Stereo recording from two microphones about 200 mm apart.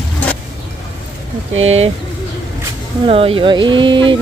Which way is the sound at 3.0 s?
30° right (ahead or behind).